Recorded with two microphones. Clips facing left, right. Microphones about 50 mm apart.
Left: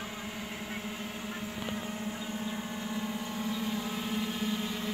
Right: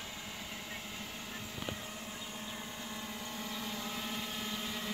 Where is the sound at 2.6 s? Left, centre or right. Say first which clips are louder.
Left 8 dB; left.